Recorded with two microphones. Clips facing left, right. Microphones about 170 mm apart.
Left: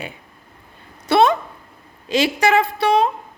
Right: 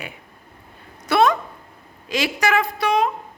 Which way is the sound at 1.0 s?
25° left (ahead or behind).